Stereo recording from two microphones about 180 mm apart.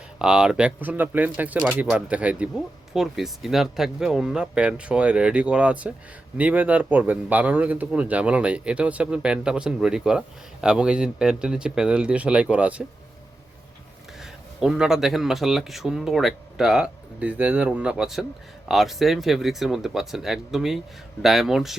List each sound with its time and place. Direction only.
0.2 s a man's voice: 5° right (ahead or behind)
14.2 s speech: 5° right (ahead or behind)